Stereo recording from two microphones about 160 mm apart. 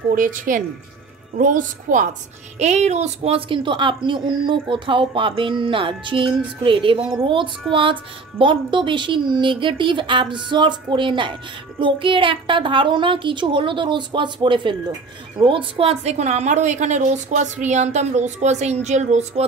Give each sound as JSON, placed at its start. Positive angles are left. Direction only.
{"t": 0.1, "sound": "a woman's voice", "side_deg": -55}